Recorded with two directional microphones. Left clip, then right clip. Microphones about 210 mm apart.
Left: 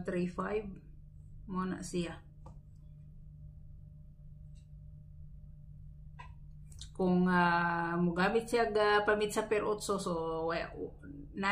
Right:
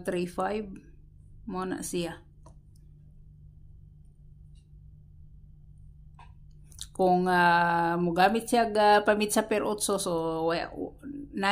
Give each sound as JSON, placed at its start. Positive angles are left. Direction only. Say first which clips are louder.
{"t": 0.0, "sound": "speech", "louder": "right 7 dB", "side_deg": -55}
{"t": 6.8, "sound": "speech", "louder": "right 9 dB", "side_deg": -50}